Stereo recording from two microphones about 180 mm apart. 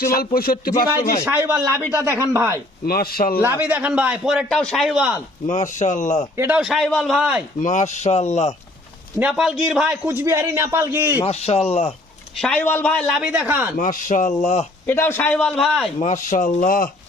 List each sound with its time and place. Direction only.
0.0 s speech: 55° left (ahead or behind)
1.2 s a man's voice: 10° right (ahead or behind)
2.8 s speech: 55° left (ahead or behind)
3.6 s a man's voice: 10° right (ahead or behind)
5.5 s speech: 40° left (ahead or behind)
6.3 s a man's voice: 15° right (ahead or behind)
6.6 s a man's voice: centre (ahead or behind)
7.6 s speech: 40° left (ahead or behind)
9.1 s a man's voice: 5° right (ahead or behind)
11.3 s speech: 35° left (ahead or behind)
12.4 s a man's voice: 5° left (ahead or behind); by 13.7 s 10° right (ahead or behind)
13.7 s speech: 50° left (ahead or behind)
14.8 s a man's voice: 15° left (ahead or behind)
16.0 s speech: 45° left (ahead or behind)